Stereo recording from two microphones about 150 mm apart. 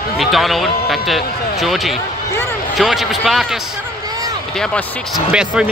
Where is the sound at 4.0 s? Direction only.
25° right (ahead or behind).